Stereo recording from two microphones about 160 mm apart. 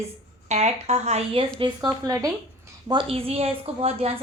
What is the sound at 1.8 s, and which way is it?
Speech, 20° right (ahead or behind).